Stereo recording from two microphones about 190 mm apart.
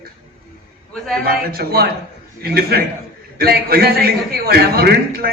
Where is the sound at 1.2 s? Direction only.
50° right (ahead or behind).